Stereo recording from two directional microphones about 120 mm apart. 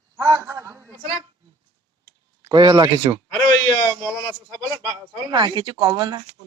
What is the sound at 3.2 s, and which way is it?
Speech, 25° left (ahead or behind).